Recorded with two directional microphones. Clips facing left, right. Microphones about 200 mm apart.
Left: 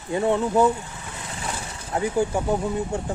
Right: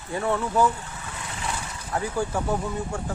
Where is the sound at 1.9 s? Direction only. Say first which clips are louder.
Left 4 dB; 20° left (ahead or behind).